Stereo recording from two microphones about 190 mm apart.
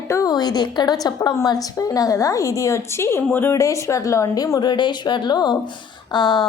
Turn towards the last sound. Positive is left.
turn(degrees=25)  # may be behind; listen again after turning